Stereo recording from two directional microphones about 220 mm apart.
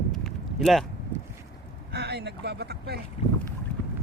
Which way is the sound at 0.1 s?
Centre (ahead or behind).